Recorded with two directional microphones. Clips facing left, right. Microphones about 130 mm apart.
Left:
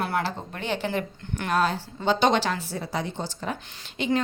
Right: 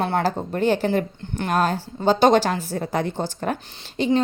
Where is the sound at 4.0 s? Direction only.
35° right (ahead or behind).